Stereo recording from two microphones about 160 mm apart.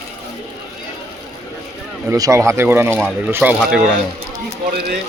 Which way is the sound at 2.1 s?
20° right (ahead or behind).